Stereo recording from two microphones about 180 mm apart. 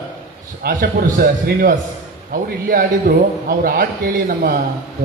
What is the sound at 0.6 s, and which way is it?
A man's voice, 50° right (ahead or behind).